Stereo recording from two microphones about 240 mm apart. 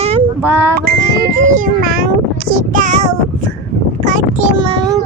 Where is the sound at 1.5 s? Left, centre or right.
Right.